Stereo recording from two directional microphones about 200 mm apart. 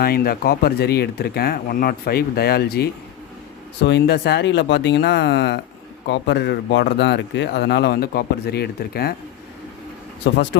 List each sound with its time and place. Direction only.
0.0 s speech: 50° left (ahead or behind)
10.3 s speech: 65° left (ahead or behind)